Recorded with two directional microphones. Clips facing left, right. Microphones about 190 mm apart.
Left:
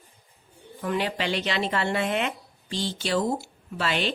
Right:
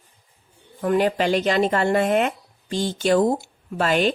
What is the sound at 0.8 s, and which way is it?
Speech, 45° right (ahead or behind).